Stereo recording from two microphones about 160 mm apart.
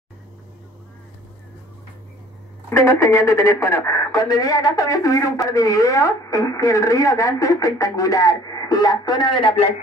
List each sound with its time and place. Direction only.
2.7 s a woman's voice: 20° left (ahead or behind)